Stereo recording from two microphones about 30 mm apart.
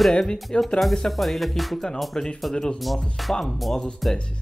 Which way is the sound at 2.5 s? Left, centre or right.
Centre.